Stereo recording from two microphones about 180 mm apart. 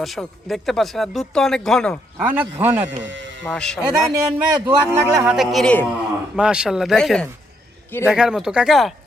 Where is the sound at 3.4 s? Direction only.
5° left (ahead or behind).